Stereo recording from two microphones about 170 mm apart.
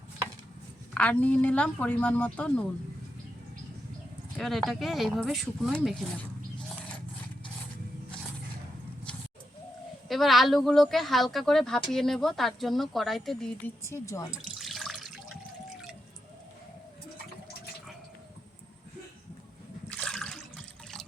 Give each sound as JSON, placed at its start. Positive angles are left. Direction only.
{"t": 0.9, "sound": "a woman's voice", "side_deg": 10}
{"t": 4.4, "sound": "speech", "side_deg": 0}
{"t": 10.1, "sound": "speech", "side_deg": 0}
{"t": 13.8, "sound": "a woman's voice", "side_deg": 15}
{"t": 14.6, "sound": "water", "side_deg": 0}
{"t": 20.0, "sound": "water", "side_deg": 5}